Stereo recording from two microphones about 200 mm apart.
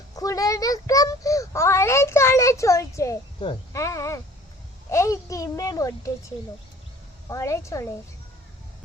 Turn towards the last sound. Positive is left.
turn(degrees=15)  # may be behind; listen again after turning